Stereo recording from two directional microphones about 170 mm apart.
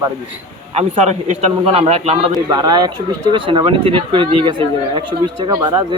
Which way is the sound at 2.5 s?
25° right (ahead or behind).